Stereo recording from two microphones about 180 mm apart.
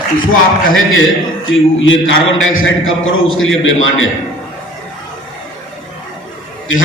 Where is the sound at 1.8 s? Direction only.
90° left.